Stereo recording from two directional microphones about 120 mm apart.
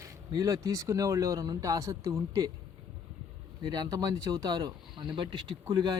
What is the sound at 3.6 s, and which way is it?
Speech, 35° right (ahead or behind).